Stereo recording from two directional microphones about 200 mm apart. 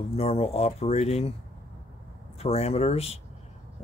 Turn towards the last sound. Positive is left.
turn(degrees=30)  # may be behind; listen again after turning